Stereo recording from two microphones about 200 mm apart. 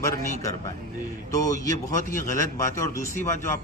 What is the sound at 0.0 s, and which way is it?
A man's voice, 15° left (ahead or behind).